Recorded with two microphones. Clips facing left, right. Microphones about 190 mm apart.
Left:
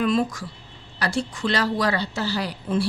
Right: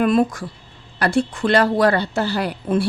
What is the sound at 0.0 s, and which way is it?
Speech, 55° right (ahead or behind).